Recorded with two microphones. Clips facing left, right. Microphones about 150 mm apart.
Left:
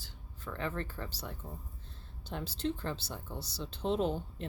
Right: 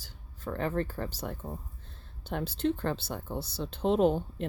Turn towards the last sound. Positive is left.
turn(degrees=-60)  # may be behind; listen again after turning